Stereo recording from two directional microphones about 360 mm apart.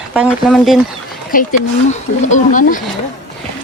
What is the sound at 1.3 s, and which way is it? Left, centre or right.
Speech, left.